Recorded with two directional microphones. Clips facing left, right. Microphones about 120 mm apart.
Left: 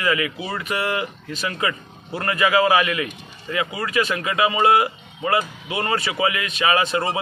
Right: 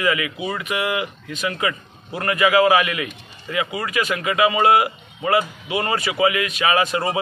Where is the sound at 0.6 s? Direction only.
35° left (ahead or behind).